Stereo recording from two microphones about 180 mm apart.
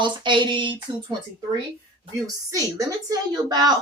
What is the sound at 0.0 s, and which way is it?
A woman's voice, 25° right (ahead or behind).